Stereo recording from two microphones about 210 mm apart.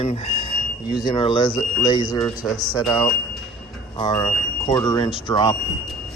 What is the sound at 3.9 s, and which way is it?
Speech, 20° left (ahead or behind).